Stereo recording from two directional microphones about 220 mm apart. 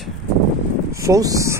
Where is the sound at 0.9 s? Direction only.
15° right (ahead or behind).